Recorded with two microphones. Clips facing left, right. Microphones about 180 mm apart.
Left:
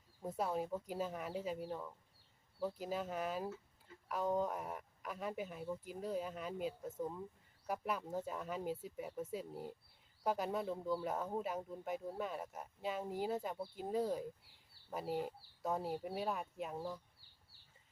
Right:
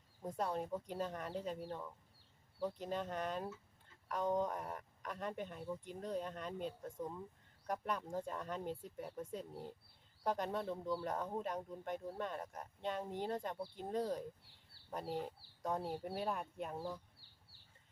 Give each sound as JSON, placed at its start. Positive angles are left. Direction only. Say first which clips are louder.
{"t": 0.2, "sound": "speech", "louder": "left 1 dB", "side_deg": 5}